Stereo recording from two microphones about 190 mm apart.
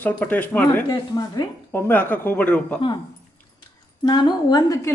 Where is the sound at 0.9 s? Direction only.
20° left (ahead or behind).